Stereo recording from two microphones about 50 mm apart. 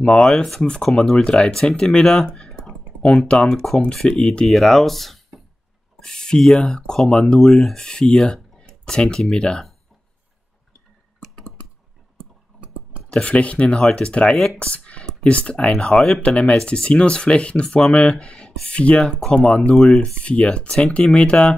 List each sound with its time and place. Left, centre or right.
0.1 s speech: centre
2.3 s typing: centre
3.4 s speech: centre
4.2 s speech: centre
4.5 s speech: centre
11.1 s typing: centre
12.5 s clicking: right
13.1 s speech: left
13.7 s speech: centre
14.0 s speech: left
14.6 s a sound: left
15.0 s speech: left
19.7 s speech: centre
20.2 s speech: left